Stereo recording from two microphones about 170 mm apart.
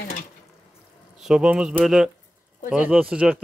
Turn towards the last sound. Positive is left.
turn(degrees=-5)  # may be behind; listen again after turning